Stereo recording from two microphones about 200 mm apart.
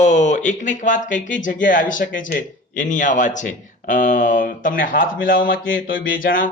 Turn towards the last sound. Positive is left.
turn(degrees=45)  # may be behind; listen again after turning